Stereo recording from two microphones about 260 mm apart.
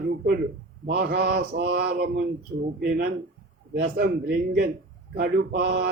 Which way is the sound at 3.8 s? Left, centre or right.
Right.